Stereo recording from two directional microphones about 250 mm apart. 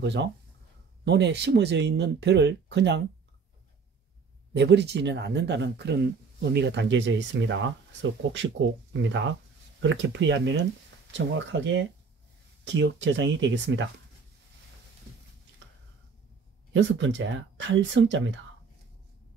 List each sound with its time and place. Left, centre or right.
0.0 s speech: right
4.6 s speech: right
16.7 s speech: right